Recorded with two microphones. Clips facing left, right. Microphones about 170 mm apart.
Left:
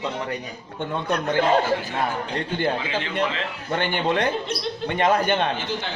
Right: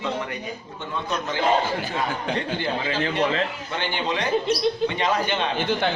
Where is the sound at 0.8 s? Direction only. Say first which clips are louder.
Left 4 dB; 55° left (ahead or behind).